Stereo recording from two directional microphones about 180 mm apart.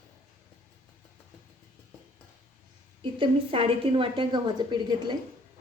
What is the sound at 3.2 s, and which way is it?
A woman's voice, 30° right (ahead or behind).